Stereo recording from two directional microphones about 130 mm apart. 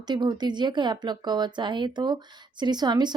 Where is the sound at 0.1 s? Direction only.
35° right (ahead or behind).